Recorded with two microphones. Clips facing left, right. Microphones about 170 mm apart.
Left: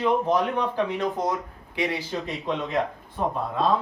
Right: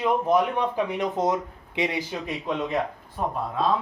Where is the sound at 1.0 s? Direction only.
20° right (ahead or behind).